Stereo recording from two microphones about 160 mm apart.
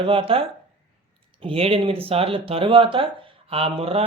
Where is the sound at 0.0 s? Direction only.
35° right (ahead or behind).